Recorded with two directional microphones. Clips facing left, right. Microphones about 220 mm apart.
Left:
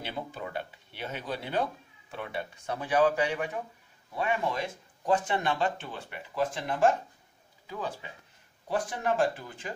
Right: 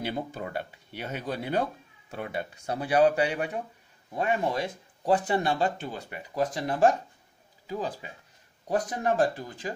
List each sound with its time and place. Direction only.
0.0 s speech: 40° right (ahead or behind)